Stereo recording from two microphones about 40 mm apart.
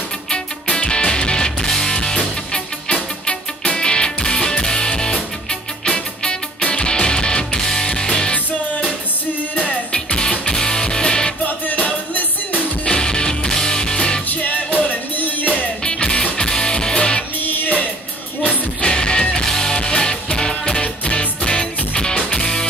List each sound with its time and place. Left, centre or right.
0.3 s music: left
9.9 s music: left
11.4 s music: left
12.8 s music: left
14.3 s music: left
15.8 s music: left
17.4 s music: left
18.8 s music: left
20.8 s music: left
21.4 s music: centre